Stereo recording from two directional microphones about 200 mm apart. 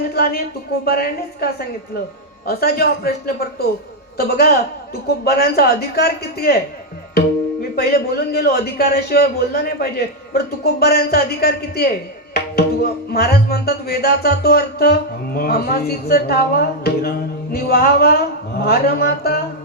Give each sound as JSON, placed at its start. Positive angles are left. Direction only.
{"t": 0.1, "sound": "a sound", "side_deg": 50}
{"t": 0.9, "sound": "speech", "side_deg": 50}
{"t": 2.5, "sound": "speech", "side_deg": 50}